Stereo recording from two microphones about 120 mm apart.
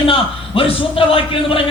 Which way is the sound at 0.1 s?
50° left (ahead or behind).